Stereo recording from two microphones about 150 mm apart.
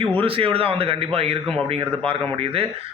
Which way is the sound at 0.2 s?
35° right (ahead or behind).